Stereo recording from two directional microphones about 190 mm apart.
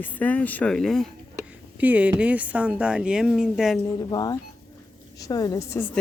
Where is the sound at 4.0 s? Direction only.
20° left (ahead or behind).